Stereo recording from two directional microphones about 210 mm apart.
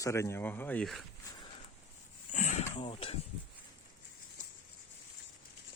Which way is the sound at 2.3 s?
35° left (ahead or behind).